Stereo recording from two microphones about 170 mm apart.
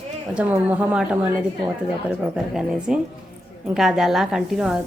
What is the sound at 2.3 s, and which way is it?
A woman's voice, 5° right (ahead or behind).